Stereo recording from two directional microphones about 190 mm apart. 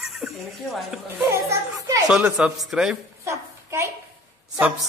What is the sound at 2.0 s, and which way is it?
Speech, 5° right (ahead or behind).